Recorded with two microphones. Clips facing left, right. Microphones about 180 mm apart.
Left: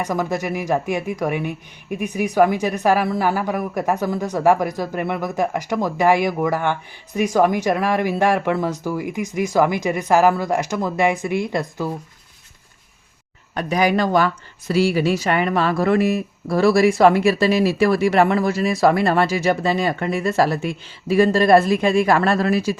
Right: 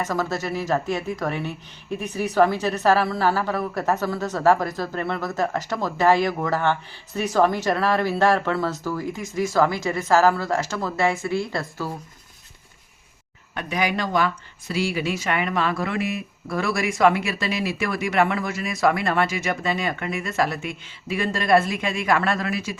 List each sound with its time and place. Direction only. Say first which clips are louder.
0.0 s speech: left 3 dB; 15° left (ahead or behind)
13.5 s speech: left 6 dB; 40° left (ahead or behind)